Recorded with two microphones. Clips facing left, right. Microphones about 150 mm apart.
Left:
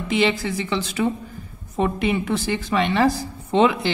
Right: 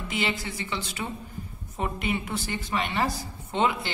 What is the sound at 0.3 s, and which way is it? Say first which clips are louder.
A woman's voice: left 8 dB; 90° left.